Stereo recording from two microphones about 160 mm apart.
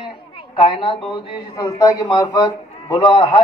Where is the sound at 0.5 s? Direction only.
35° left (ahead or behind).